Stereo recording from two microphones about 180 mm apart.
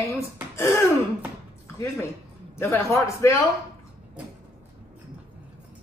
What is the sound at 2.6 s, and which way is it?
Speech, 15° left (ahead or behind).